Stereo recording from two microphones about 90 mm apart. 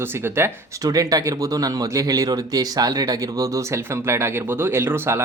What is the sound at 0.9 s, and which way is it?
Speech, 40° right (ahead or behind).